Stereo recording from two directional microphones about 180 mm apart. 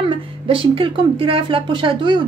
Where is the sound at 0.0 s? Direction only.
30° right (ahead or behind).